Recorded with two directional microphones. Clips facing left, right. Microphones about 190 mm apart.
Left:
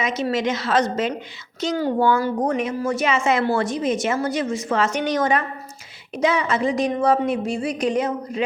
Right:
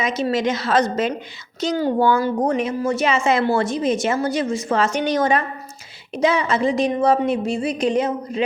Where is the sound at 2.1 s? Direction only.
25° right (ahead or behind).